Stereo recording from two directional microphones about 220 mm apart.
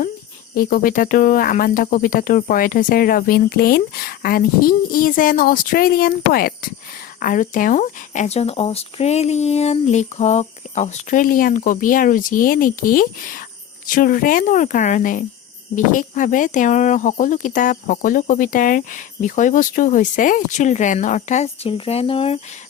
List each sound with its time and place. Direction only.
0.5 s speech: 40° left (ahead or behind); by 22.4 s 25° left (ahead or behind)